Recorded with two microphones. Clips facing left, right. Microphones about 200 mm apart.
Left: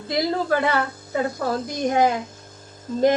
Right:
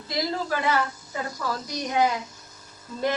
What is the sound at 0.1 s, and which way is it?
A woman's voice, 55° left (ahead or behind).